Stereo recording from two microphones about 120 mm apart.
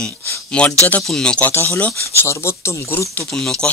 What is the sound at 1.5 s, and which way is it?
Speech, 20° left (ahead or behind).